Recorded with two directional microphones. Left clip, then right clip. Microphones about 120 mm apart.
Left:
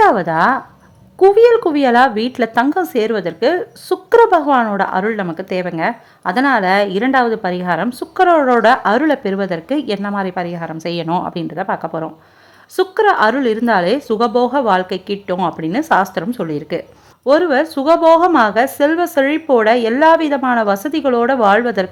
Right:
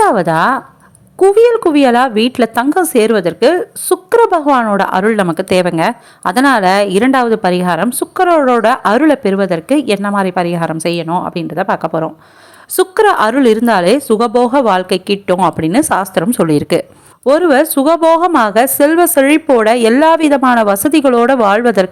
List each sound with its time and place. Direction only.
0.2 s a woman's voice: 25° right (ahead or behind)
10.9 s speech: 20° right (ahead or behind)
11.4 s a woman's voice: 30° right (ahead or behind)
16.3 s a woman's voice: 55° right (ahead or behind)
17.2 s a woman's voice: 35° right (ahead or behind)